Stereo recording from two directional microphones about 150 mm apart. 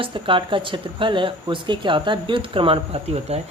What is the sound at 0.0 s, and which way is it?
Speech, 35° right (ahead or behind).